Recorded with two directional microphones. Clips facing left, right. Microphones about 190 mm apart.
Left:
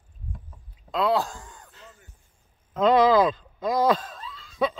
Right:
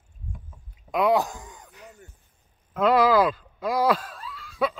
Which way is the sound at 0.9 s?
15° right (ahead or behind).